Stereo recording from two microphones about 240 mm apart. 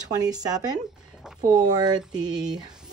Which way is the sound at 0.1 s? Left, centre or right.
Centre.